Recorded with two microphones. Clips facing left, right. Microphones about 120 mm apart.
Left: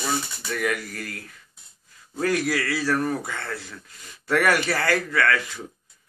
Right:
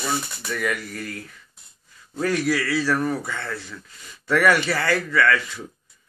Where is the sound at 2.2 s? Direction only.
45° left (ahead or behind).